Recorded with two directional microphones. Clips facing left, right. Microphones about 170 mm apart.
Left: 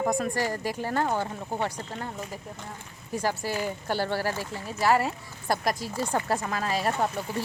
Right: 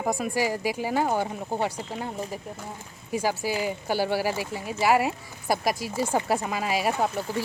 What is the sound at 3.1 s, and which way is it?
Speech, 5° right (ahead or behind).